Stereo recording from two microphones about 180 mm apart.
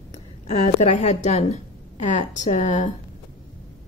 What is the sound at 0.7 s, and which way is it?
A woman's voice, 40° left (ahead or behind).